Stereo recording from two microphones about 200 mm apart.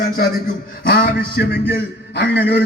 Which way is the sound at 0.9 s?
45° left (ahead or behind).